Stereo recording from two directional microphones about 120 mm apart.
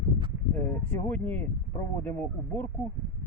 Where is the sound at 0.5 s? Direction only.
15° left (ahead or behind).